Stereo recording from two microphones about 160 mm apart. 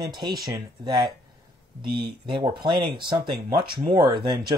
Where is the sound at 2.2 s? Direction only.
30° right (ahead or behind).